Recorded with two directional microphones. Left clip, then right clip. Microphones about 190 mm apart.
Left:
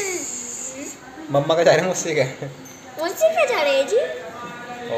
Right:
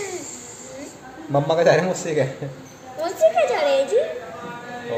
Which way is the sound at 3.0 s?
10° left (ahead or behind).